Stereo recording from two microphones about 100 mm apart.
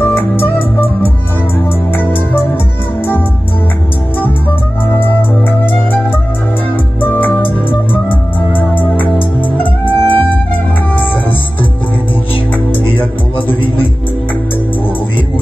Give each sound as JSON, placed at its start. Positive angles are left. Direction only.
{"t": 0.0, "sound": "music", "side_deg": 20}
{"t": 5.6, "sound": "music", "side_deg": 20}
{"t": 7.0, "sound": "music", "side_deg": 20}
{"t": 8.5, "sound": "music", "side_deg": 20}